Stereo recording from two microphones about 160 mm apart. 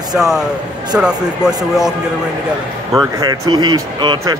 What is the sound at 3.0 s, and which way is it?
Speech, 25° right (ahead or behind).